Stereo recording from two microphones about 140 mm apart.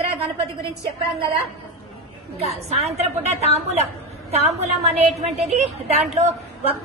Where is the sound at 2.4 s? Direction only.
45° right (ahead or behind).